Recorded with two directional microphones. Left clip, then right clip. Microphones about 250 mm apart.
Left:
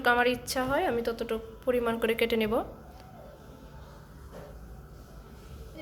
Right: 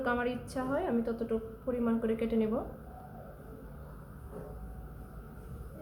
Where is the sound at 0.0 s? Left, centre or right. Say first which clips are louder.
Left 8 dB; left.